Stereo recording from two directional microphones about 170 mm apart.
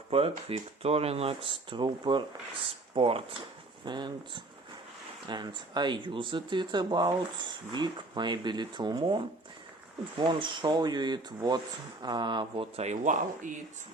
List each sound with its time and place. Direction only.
0.1 s speech: 35° right (ahead or behind)